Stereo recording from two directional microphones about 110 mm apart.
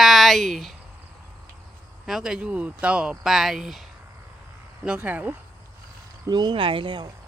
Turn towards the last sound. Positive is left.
turn(degrees=-45)  # may be behind; listen again after turning